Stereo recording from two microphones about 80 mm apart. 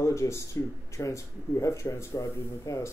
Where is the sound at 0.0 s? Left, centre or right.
Left.